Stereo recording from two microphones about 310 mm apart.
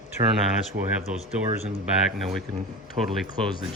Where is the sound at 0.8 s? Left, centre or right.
Right.